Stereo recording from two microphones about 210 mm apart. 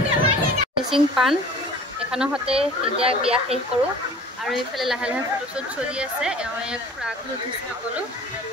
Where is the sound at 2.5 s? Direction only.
25° right (ahead or behind).